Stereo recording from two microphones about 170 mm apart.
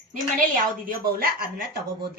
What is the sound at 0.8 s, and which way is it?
Speech, 60° right (ahead or behind).